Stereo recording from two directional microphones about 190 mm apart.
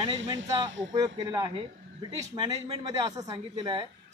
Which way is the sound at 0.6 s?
20° right (ahead or behind).